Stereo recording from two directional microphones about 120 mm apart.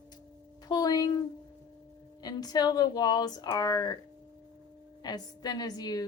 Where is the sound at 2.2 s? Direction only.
35° left (ahead or behind).